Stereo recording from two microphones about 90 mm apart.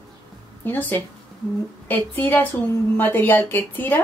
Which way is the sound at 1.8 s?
20° left (ahead or behind).